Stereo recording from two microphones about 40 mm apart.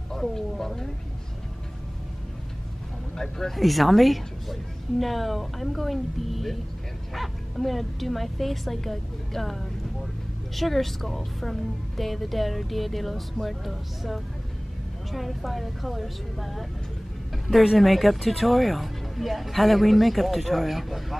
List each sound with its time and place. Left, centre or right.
0.1 s speech: centre
3.2 s a woman's voice: centre
17.7 s a woman's voice: centre